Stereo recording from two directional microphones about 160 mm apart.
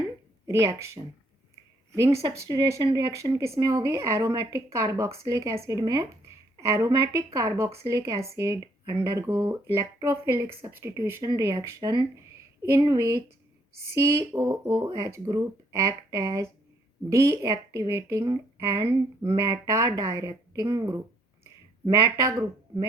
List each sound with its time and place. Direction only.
0.4 s a woman's voice: 15° right (ahead or behind)
22.1 s a woman's voice: 20° right (ahead or behind)